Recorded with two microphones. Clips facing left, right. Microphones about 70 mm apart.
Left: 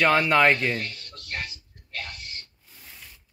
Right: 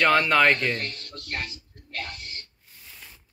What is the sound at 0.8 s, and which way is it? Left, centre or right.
Speech, right.